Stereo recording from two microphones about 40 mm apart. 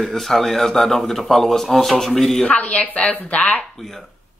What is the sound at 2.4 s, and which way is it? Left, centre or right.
A woman's voice, left.